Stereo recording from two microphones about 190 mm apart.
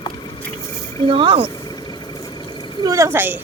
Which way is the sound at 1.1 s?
25° right (ahead or behind).